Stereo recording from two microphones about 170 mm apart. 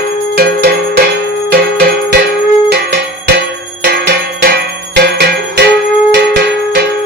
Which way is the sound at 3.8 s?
75° right (ahead or behind).